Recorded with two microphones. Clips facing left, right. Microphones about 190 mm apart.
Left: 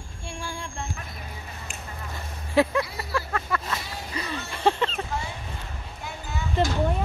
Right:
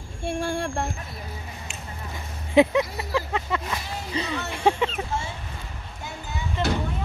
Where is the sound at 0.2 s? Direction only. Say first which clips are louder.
Right 10 dB; 60° right (ahead or behind).